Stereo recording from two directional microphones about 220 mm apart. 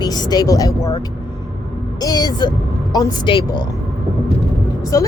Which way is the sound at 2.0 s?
15° left (ahead or behind).